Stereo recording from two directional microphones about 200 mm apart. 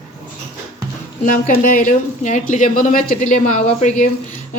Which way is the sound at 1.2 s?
40° left (ahead or behind).